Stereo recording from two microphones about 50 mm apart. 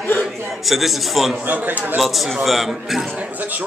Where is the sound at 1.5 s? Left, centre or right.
Right.